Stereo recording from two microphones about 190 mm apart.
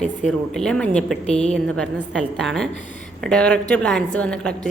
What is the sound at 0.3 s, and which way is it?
A woman's voice, 5° left (ahead or behind).